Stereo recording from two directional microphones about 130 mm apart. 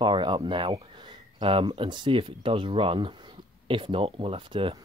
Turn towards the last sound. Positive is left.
turn(degrees=-40)  # may be behind; listen again after turning